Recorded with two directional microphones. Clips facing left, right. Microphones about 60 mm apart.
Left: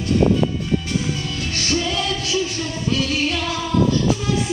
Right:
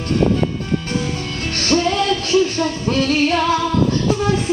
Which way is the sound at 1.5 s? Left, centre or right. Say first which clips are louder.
Right 6 dB; right.